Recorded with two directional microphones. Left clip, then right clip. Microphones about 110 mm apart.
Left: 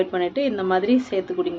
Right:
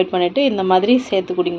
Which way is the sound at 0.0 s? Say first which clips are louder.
Right 6 dB; 15° right (ahead or behind).